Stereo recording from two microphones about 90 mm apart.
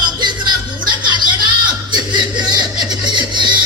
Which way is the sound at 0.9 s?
55° right (ahead or behind).